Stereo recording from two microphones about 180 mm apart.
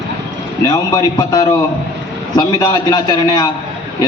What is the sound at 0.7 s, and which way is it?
A man's voice, 20° left (ahead or behind).